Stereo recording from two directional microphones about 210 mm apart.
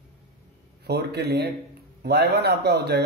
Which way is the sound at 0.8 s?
50° right (ahead or behind).